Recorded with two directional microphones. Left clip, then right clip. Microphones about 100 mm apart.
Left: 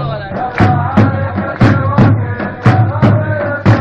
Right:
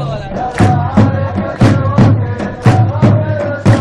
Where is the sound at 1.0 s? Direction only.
30° right (ahead or behind).